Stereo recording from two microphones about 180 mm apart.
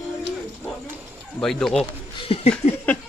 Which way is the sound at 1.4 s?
5° left (ahead or behind).